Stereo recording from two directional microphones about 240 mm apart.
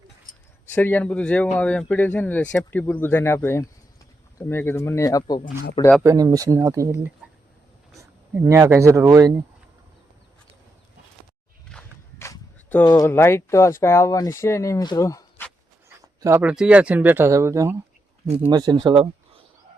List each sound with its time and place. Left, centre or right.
0.7 s speech: centre
6.0 s speech: centre
8.3 s speech: centre
11.7 s walk: centre
12.3 s a sound: centre
12.8 s speech: centre
16.0 s speech: centre